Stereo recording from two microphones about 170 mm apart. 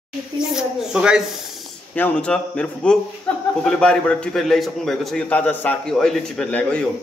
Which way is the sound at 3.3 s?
5° left (ahead or behind).